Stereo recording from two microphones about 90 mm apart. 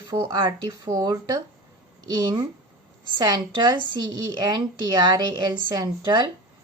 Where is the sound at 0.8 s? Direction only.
45° right (ahead or behind).